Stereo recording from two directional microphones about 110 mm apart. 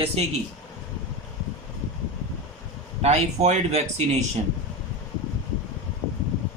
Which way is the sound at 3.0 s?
85° right.